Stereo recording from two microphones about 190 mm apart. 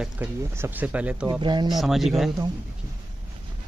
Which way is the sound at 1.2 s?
20° right (ahead or behind).